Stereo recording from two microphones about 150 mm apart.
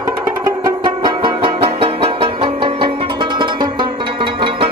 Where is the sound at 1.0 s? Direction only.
35° right (ahead or behind).